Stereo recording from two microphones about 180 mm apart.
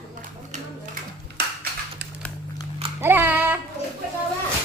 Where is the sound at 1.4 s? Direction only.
65° right (ahead or behind).